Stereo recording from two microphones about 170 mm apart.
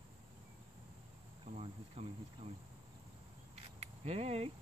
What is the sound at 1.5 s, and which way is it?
Speech, 35° right (ahead or behind).